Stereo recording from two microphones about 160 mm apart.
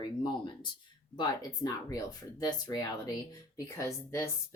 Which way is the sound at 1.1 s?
25° left (ahead or behind).